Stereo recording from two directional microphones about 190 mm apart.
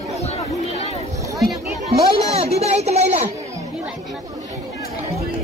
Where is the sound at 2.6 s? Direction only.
35° right (ahead or behind).